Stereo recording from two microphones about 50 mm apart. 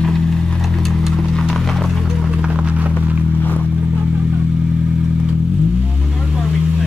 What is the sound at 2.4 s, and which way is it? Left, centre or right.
Music, right.